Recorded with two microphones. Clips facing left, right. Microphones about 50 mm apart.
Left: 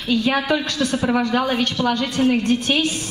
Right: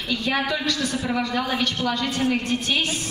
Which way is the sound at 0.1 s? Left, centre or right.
Left.